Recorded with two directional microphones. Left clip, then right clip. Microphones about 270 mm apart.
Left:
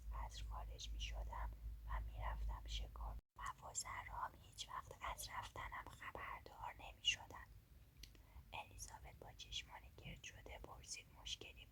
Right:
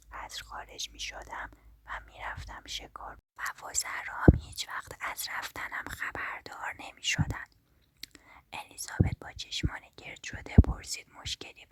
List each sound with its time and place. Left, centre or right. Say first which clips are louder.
0.1 s speech: right 14 dB; right